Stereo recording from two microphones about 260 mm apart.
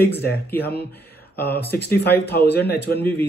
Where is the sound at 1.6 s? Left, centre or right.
Left.